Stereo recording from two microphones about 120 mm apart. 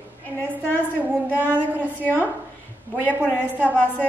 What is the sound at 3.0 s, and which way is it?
Speech, 15° right (ahead or behind).